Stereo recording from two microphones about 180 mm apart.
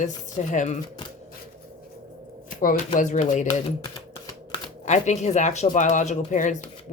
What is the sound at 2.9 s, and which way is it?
Speech, 45° left (ahead or behind).